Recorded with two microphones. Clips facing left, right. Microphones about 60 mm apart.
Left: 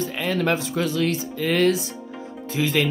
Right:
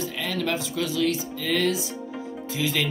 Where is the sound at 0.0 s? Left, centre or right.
Left.